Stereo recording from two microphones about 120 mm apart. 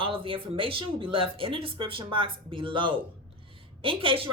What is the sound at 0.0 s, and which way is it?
Speech, 50° right (ahead or behind).